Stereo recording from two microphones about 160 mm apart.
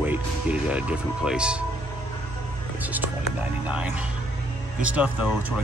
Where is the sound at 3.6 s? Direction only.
10° right (ahead or behind).